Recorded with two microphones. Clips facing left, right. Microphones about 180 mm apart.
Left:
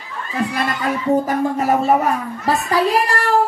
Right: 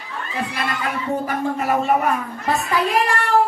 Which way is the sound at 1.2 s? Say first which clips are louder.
Left 4 dB; 40° left (ahead or behind).